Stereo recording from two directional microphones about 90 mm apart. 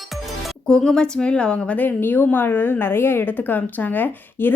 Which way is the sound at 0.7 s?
10° left (ahead or behind).